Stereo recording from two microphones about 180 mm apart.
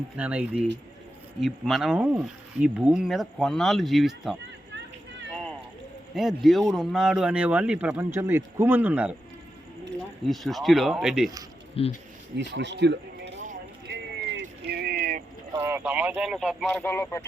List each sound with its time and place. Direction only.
0.2 s speech: 5° right (ahead or behind)
6.1 s speech: centre (ahead or behind)
10.2 s speech: centre (ahead or behind)
11.8 s speech: 30° left (ahead or behind)
12.4 s speech: 80° right
13.8 s a sound: 70° right (ahead or behind)
14.7 s a sound: 60° right (ahead or behind)
15.6 s speech: 10° right (ahead or behind)
16.8 s speech: 10° left (ahead or behind)